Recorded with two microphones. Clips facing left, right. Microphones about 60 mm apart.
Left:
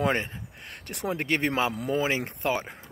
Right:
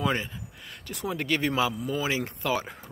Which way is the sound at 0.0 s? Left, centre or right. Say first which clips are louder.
Left 2 dB; left.